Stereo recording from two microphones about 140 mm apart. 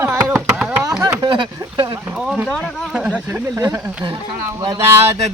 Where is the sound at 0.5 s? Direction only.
10° right (ahead or behind).